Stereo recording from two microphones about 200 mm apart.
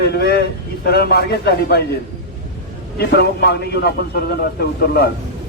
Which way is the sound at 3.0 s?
50° left (ahead or behind).